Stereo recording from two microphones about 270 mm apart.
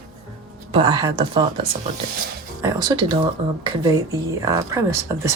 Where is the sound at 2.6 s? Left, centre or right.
Centre.